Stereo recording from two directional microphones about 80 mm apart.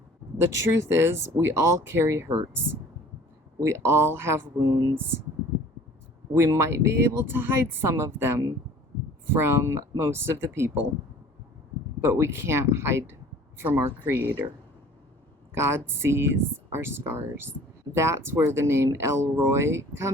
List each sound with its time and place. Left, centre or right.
0.5 s speech: right
3.6 s speech: right
6.3 s speech: right
12.0 s speech: right
15.5 s speech: right